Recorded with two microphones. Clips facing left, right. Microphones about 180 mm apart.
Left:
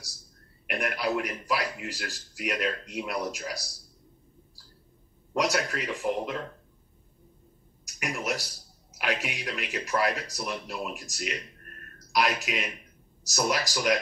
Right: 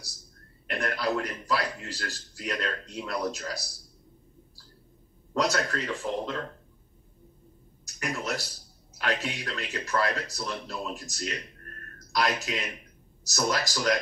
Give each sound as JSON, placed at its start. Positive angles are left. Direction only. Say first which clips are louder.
{"t": 0.7, "sound": "a man's voice", "louder": "even", "side_deg": 15}
{"t": 5.3, "sound": "a man's voice", "louder": "even", "side_deg": 15}
{"t": 7.8, "sound": "a man's voice", "louder": "even", "side_deg": 15}